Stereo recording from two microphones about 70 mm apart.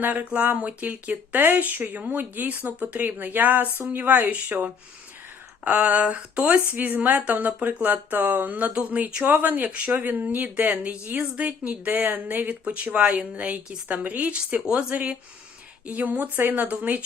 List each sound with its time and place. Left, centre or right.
0.0 s speech: right